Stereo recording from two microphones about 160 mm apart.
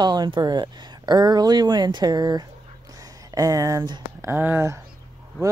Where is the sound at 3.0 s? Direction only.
20° right (ahead or behind).